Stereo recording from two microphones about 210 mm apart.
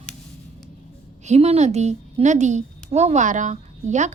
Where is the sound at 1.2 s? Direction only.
30° right (ahead or behind).